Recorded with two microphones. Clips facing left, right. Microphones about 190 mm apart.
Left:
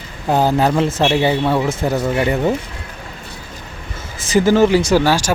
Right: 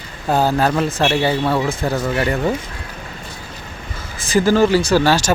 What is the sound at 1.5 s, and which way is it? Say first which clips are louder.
Speech: left 1 dB; centre (ahead or behind).